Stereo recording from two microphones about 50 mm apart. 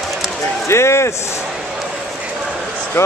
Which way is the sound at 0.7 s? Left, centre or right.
Left.